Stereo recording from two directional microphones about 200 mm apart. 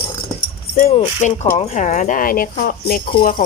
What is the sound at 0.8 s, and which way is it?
Speech, 35° left (ahead or behind).